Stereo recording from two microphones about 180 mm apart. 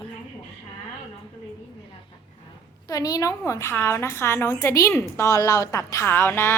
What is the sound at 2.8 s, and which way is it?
Speech, 20° left (ahead or behind).